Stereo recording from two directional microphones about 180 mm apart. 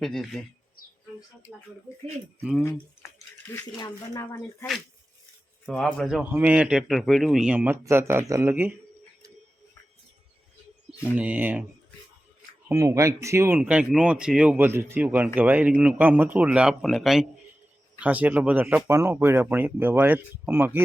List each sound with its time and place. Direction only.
0.0 s speech: centre (ahead or behind)
2.4 s speech: 5° right (ahead or behind)
3.5 s speech: 20° left (ahead or behind)
5.6 s speech: centre (ahead or behind)
11.0 s speech: 10° right (ahead or behind)
12.6 s speech: 15° right (ahead or behind)